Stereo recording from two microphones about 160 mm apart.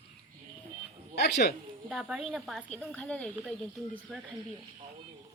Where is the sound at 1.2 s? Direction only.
90° left.